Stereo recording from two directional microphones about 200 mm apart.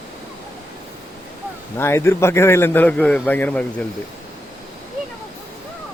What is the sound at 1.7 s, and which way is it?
A man's voice, 10° left (ahead or behind).